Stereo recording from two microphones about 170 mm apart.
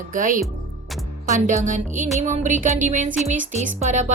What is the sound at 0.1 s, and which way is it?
A woman's voice, 55° right (ahead or behind).